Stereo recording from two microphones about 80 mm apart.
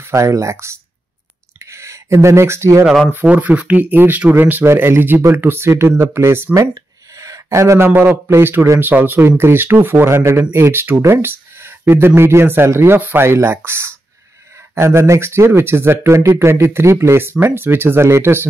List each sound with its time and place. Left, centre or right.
0.0 s speech: right
3.1 s speech: right
7.2 s a sound: right
7.9 s speech: right